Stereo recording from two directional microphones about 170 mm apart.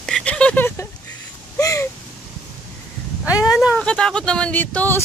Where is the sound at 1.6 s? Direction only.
20° left (ahead or behind).